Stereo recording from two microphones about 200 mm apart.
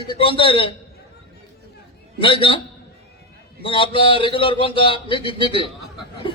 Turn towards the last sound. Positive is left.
turn(degrees=25)  # may be behind; listen again after turning